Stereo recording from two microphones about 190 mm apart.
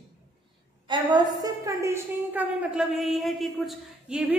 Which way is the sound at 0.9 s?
25° right (ahead or behind).